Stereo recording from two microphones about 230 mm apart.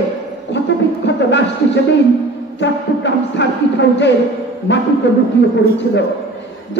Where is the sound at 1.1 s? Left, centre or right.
Left.